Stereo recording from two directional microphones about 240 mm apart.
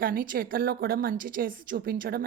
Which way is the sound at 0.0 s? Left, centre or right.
Right.